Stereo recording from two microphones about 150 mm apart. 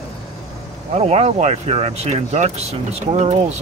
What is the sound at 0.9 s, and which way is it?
Speech, 45° right (ahead or behind).